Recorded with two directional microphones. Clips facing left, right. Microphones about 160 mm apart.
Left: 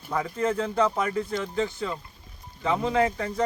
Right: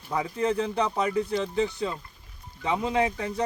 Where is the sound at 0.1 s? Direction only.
15° right (ahead or behind).